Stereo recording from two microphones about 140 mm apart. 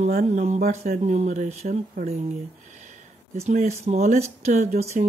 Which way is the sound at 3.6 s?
55° right (ahead or behind).